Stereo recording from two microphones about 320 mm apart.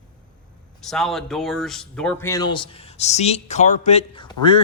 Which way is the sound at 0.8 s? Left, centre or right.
Centre.